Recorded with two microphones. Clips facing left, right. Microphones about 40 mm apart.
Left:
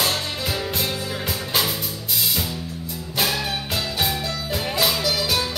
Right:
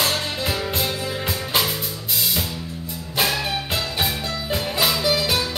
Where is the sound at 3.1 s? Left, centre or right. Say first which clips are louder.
Right 2 dB; centre.